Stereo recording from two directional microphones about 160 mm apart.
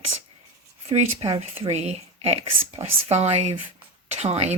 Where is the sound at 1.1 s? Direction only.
35° right (ahead or behind).